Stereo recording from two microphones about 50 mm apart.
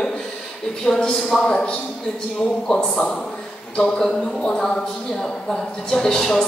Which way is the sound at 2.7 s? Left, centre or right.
Centre.